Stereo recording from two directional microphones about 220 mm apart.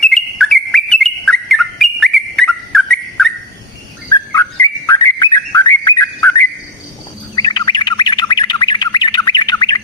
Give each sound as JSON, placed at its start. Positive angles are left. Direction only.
{"t": 0.0, "sound": "bird", "side_deg": 0}
{"t": 4.1, "sound": "bird", "side_deg": 15}